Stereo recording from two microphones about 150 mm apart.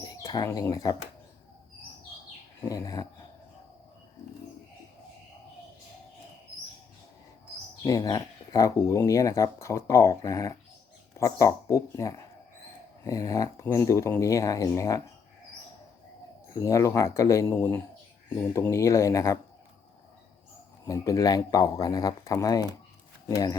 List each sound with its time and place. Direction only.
0.0 s speech: 25° left (ahead or behind)
2.6 s speech: 25° left (ahead or behind)
7.9 s speech: 25° left (ahead or behind)
16.5 s speech: 20° left (ahead or behind)
20.8 s speech: 20° left (ahead or behind)